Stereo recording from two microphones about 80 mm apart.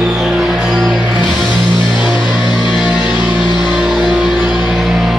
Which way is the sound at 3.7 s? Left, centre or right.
Centre.